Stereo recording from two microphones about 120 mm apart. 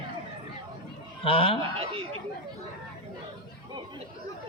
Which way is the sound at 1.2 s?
50° left (ahead or behind).